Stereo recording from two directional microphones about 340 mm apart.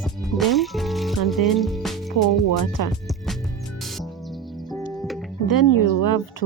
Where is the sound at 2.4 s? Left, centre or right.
Left.